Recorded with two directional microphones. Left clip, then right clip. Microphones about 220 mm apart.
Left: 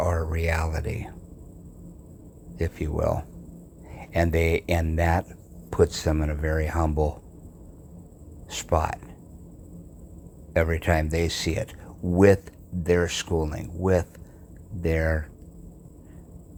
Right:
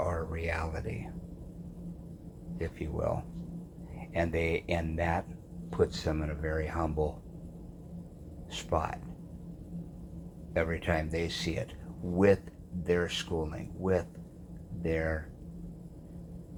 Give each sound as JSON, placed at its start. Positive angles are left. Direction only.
{"t": 0.0, "sound": "speech", "side_deg": 50}
{"t": 2.6, "sound": "speech", "side_deg": 50}
{"t": 8.4, "sound": "speech", "side_deg": 50}
{"t": 10.5, "sound": "speech", "side_deg": 50}